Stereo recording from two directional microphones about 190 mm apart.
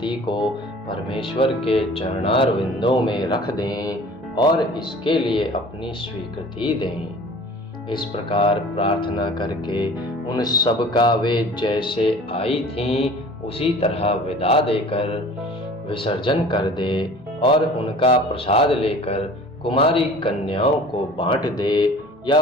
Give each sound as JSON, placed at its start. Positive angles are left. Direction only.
{"t": 0.0, "sound": "a man's voice", "side_deg": 25}